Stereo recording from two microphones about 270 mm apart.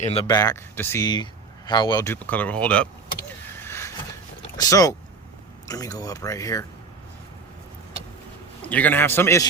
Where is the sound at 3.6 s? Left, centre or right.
Centre.